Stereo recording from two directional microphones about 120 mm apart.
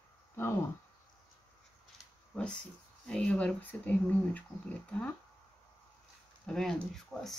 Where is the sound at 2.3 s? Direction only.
10° left (ahead or behind).